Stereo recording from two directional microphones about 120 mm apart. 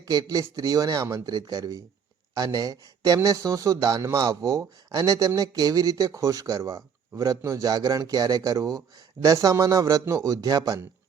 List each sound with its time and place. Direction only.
0.1 s a man's voice: 35° right (ahead or behind)